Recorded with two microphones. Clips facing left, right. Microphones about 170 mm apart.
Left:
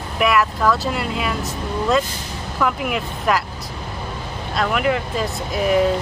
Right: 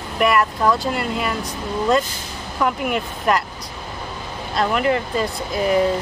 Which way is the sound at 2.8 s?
Centre (ahead or behind).